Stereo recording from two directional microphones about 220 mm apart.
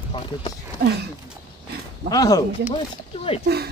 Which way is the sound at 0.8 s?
50° right (ahead or behind).